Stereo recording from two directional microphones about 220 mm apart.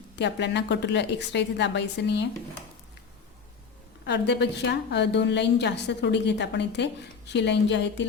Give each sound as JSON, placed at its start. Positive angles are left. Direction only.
{"t": 0.2, "sound": "a woman's voice", "side_deg": 50}
{"t": 4.0, "sound": "a woman's voice", "side_deg": 50}